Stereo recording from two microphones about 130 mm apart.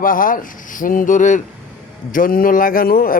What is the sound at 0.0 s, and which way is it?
A man's voice, 90° left.